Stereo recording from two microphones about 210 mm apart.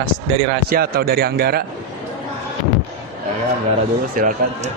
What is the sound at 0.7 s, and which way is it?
Speech, 45° right (ahead or behind).